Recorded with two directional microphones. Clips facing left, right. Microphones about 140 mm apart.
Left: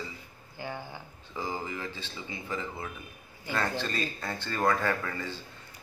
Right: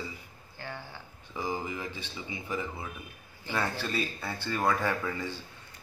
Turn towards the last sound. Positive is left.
turn(degrees=-15)  # may be behind; listen again after turning